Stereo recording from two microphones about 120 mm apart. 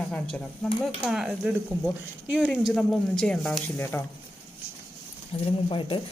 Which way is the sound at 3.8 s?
20° left (ahead or behind).